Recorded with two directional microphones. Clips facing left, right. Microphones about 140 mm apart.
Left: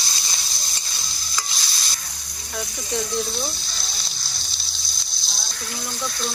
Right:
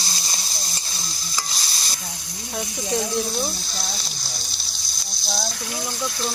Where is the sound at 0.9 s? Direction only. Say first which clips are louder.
Right 2 dB; 35° right (ahead or behind).